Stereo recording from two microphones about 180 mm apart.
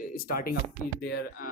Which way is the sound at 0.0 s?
55° left (ahead or behind).